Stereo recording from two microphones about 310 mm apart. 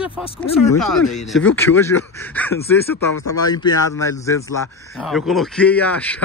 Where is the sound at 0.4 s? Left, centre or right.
Centre.